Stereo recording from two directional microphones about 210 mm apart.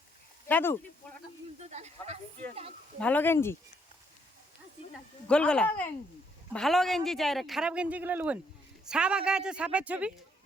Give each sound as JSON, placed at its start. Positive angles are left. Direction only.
{"t": 0.4, "sound": "speech", "side_deg": 10}
{"t": 1.5, "sound": "speech", "side_deg": -30}
{"t": 3.0, "sound": "speech", "side_deg": 10}
{"t": 5.3, "sound": "speech", "side_deg": 5}